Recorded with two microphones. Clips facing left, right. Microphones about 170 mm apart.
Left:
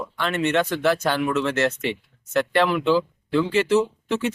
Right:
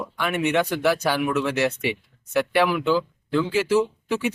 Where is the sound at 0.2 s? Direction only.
15° right (ahead or behind).